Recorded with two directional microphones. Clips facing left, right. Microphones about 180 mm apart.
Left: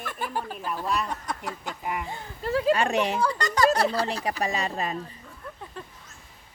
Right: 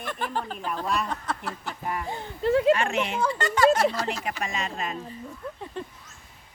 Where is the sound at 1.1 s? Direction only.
15° left (ahead or behind).